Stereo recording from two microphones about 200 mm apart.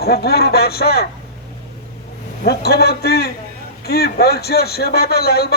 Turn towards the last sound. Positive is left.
turn(degrees=50)  # may be behind; listen again after turning